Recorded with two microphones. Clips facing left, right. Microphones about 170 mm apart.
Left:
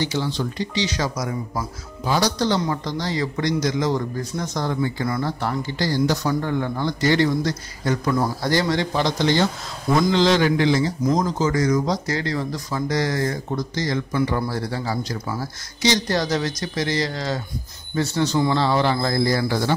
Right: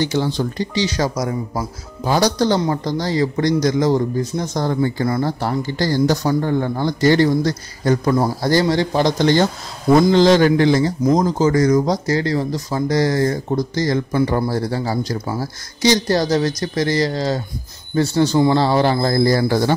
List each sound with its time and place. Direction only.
0.0 s speech: 50° right (ahead or behind)
0.4 s a man's voice: 35° right (ahead or behind)